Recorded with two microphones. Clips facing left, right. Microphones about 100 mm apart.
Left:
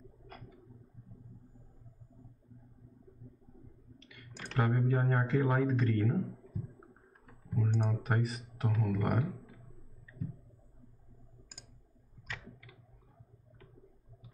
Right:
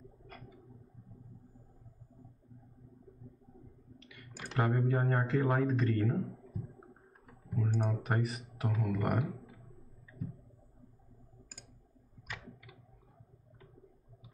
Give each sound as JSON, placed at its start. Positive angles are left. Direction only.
{"t": 4.0, "sound": "clicking", "side_deg": 0}
{"t": 4.4, "sound": "speech", "side_deg": -5}
{"t": 7.5, "sound": "speech", "side_deg": 0}